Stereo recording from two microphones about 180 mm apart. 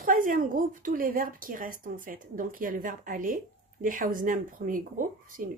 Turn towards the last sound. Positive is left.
turn(degrees=-45)  # may be behind; listen again after turning